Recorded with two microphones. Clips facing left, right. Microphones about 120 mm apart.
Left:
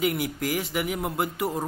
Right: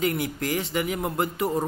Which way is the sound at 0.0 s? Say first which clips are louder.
Even; 10° left (ahead or behind).